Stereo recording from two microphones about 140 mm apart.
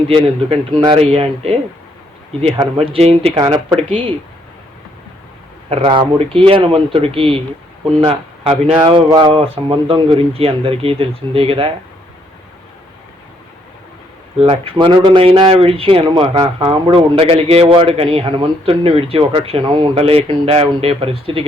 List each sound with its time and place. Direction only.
0.9 s speech: 45° right (ahead or behind)
2.7 s speech: 45° right (ahead or behind)
5.6 s speech: 40° right (ahead or behind)
14.3 s speech: 40° right (ahead or behind)